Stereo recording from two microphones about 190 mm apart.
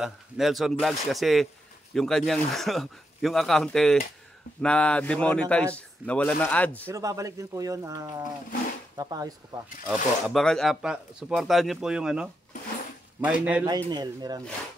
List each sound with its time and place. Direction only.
0.0 s speech: centre (ahead or behind)
6.9 s speech: 15° right (ahead or behind)
9.8 s speech: 5° left (ahead or behind)
13.8 s speech: 20° right (ahead or behind)